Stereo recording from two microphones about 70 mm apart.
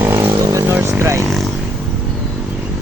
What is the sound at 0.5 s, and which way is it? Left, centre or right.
Vehicle, right.